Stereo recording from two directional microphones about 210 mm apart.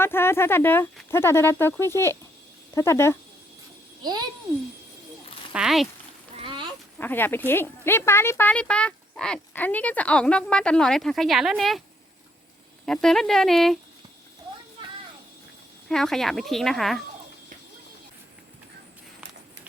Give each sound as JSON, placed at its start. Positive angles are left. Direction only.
{"t": 0.0, "sound": "speech", "side_deg": 10}
{"t": 4.0, "sound": "a child's voice", "side_deg": -20}
{"t": 5.5, "sound": "speech", "side_deg": 0}
{"t": 6.4, "sound": "a sound", "side_deg": -25}
{"t": 7.0, "sound": "speech", "side_deg": 10}
{"t": 12.8, "sound": "speech", "side_deg": 0}
{"t": 15.9, "sound": "speech", "side_deg": 0}